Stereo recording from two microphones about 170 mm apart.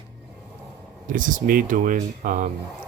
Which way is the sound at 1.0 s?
50° right (ahead or behind).